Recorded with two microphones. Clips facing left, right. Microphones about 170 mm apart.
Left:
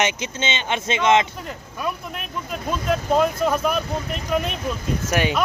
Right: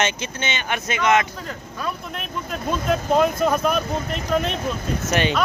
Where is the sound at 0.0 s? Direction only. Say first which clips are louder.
Left 1 dB; 20° left (ahead or behind).